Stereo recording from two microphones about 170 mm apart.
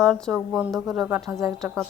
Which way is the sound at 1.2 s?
20° right (ahead or behind).